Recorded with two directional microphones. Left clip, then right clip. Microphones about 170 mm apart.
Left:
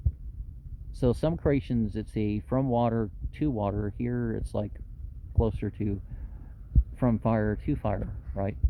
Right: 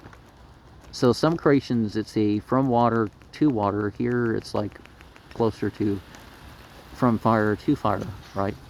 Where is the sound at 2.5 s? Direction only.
40° left (ahead or behind).